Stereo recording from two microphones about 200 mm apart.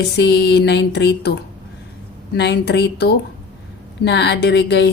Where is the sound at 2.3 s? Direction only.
55° left (ahead or behind).